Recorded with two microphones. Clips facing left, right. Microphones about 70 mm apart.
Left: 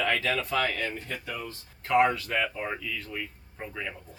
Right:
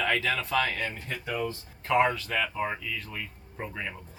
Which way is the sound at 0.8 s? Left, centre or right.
Right.